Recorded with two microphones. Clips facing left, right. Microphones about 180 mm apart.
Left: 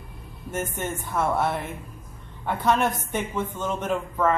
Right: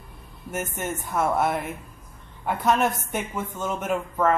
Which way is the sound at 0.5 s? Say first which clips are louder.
Even; 10° right (ahead or behind).